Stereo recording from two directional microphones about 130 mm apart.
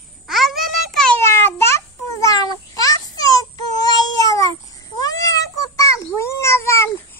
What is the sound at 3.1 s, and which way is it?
Baby cry, 30° left (ahead or behind).